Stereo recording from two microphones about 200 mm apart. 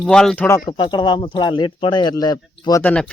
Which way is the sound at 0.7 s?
20° left (ahead or behind).